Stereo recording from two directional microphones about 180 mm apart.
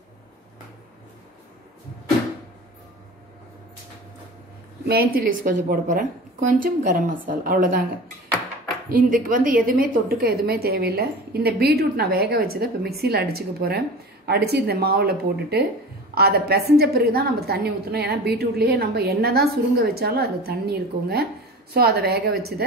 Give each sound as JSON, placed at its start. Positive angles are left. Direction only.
{"t": 4.8, "sound": "a woman's voice", "side_deg": -55}
{"t": 8.8, "sound": "a woman's voice", "side_deg": -50}